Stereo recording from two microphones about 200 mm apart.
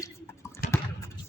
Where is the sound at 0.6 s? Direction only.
45° left (ahead or behind).